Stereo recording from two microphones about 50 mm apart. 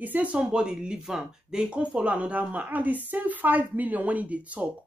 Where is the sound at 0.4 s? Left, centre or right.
Centre.